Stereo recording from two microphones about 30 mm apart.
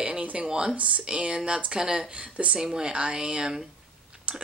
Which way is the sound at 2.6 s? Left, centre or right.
Right.